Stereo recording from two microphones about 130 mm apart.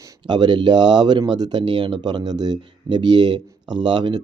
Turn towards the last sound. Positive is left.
turn(degrees=-35)  # may be behind; listen again after turning